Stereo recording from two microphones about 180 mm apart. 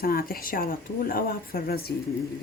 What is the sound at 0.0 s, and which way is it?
Speech, 55° left (ahead or behind).